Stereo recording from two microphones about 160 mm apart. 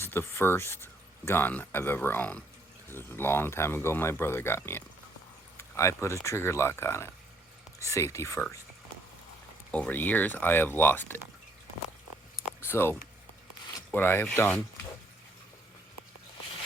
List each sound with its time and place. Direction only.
0.0 s speech: 15° left (ahead or behind)
9.7 s speech: 10° left (ahead or behind)
12.6 s speech: 15° left (ahead or behind)